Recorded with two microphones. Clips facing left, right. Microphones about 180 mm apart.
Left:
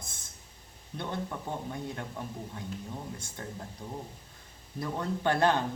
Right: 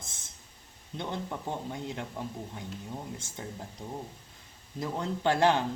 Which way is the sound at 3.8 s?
10° right (ahead or behind).